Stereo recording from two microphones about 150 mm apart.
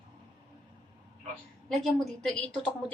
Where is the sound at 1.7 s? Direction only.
Centre (ahead or behind).